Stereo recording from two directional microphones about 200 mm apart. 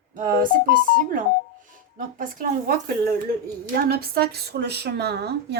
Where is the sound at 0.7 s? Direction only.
45° right (ahead or behind).